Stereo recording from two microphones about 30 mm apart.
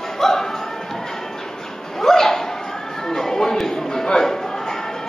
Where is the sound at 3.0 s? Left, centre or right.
Centre.